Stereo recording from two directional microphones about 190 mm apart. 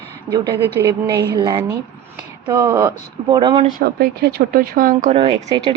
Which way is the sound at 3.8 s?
55° right (ahead or behind).